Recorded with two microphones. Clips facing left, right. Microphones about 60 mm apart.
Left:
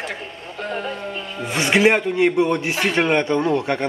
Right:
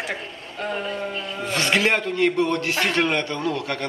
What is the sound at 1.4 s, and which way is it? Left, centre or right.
A man's voice, centre.